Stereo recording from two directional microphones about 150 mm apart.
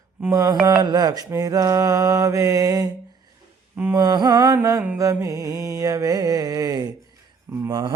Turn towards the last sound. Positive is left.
turn(degrees=-25)  # may be behind; listen again after turning